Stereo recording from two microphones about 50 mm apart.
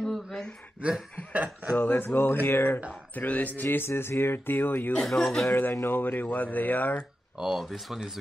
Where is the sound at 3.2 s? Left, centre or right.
Left.